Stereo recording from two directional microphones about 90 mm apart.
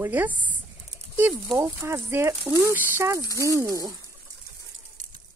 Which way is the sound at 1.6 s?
25° right (ahead or behind).